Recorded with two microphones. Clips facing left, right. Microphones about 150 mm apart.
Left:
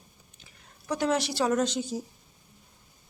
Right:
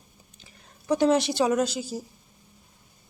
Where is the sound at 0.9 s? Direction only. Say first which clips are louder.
Right 6 dB; 25° right (ahead or behind).